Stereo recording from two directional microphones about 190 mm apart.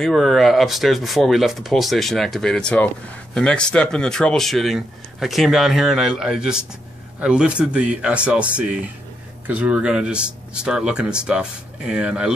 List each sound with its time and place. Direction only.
0.0 s speech: centre (ahead or behind)